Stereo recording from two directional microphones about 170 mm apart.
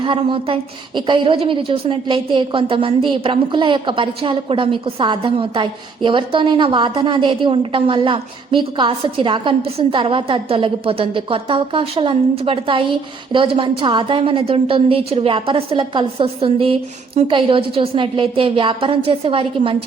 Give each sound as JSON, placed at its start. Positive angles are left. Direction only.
{"t": 0.0, "sound": "a woman's voice", "side_deg": -30}